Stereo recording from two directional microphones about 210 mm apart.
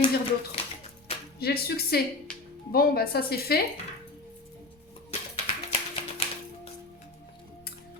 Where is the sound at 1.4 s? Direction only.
50° left (ahead or behind).